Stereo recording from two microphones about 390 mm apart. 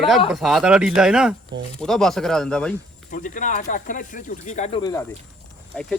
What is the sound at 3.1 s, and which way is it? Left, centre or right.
Speech, centre.